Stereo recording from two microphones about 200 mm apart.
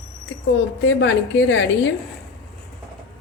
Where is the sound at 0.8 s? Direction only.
65° left (ahead or behind).